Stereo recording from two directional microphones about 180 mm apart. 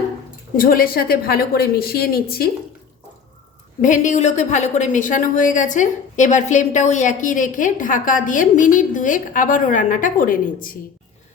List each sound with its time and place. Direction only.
0.5 s a woman's voice: 55° left (ahead or behind)
3.8 s a woman's voice: 45° left (ahead or behind)